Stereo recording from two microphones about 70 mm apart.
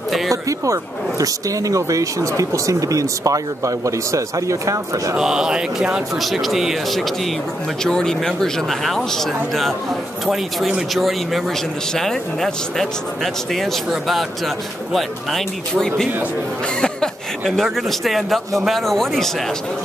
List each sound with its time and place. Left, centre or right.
0.3 s speech: right
5.1 s speech: centre
6.1 s a man's voice: centre